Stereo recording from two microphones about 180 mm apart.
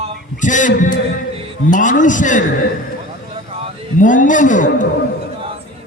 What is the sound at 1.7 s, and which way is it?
Speech, 45° left (ahead or behind).